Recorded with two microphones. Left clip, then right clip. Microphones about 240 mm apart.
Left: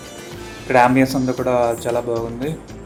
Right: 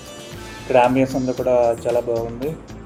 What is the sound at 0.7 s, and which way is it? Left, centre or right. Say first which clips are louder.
Speech: left 1 dB; left.